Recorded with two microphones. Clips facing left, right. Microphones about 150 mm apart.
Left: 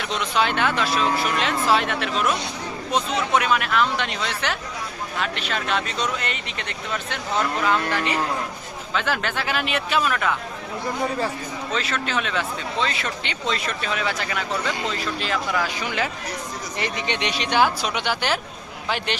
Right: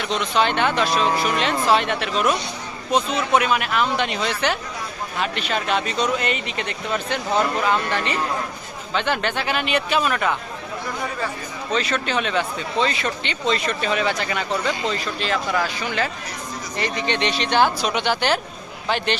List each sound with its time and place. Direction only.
0.0 s speech: 5° left (ahead or behind)
11.7 s speech: centre (ahead or behind)
16.7 s speech: 20° left (ahead or behind)